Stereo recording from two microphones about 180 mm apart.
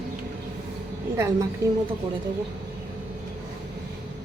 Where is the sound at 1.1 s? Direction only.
15° right (ahead or behind).